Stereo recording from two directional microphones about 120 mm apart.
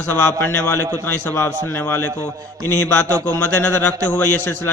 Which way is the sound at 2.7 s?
20° left (ahead or behind).